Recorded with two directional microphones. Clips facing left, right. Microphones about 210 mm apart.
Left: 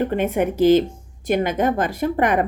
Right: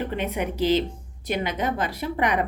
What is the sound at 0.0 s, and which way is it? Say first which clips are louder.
Speech: left 7 dB; 50° left (ahead or behind).